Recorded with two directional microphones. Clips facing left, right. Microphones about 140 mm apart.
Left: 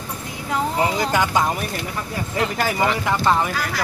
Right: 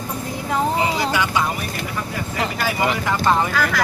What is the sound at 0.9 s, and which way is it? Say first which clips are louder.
Speech: left 1 dB; 45° left (ahead or behind).